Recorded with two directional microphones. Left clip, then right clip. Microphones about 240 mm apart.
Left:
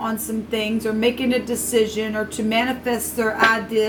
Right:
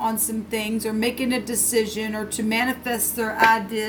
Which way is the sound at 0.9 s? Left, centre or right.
Right.